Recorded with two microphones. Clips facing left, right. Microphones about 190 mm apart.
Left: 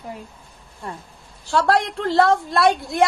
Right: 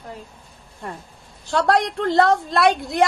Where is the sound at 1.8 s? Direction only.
60° right (ahead or behind).